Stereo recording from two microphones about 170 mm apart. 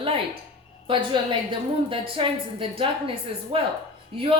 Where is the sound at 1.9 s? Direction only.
30° right (ahead or behind).